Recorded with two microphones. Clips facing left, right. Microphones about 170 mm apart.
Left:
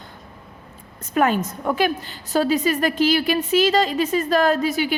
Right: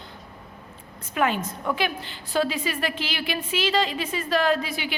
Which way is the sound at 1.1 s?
45° left (ahead or behind).